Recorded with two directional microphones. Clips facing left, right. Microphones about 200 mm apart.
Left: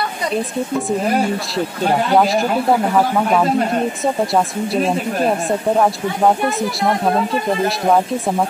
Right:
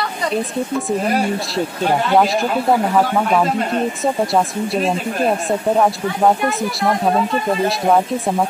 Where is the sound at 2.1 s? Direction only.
Centre (ahead or behind).